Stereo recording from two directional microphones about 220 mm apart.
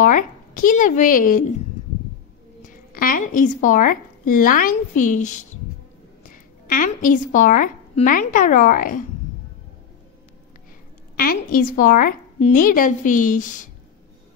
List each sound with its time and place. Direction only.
0.0 s speech: 35° left (ahead or behind)
2.9 s a woman's voice: 40° left (ahead or behind)
11.1 s speech: 40° left (ahead or behind)